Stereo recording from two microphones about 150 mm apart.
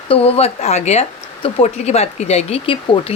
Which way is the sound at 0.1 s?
40° left (ahead or behind).